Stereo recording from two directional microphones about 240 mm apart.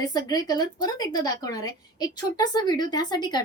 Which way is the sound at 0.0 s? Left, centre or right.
Centre.